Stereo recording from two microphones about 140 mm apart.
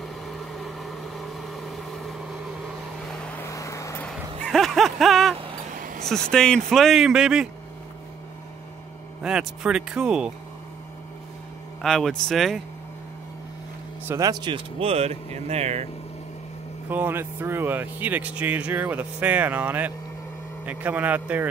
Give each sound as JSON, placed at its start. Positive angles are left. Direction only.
{"t": 0.0, "sound": "vehicle", "side_deg": 0}
{"t": 3.4, "sound": "vehicle", "side_deg": 20}
{"t": 4.0, "sound": "a sound", "side_deg": 5}
{"t": 5.3, "sound": "vehicle", "side_deg": -40}
{"t": 6.3, "sound": "speech", "side_deg": 5}
{"t": 9.2, "sound": "speech", "side_deg": -5}
{"t": 11.8, "sound": "speech", "side_deg": 0}
{"t": 14.0, "sound": "speech", "side_deg": -20}
{"t": 14.4, "sound": "speech", "side_deg": -40}
{"t": 16.9, "sound": "speech", "side_deg": -15}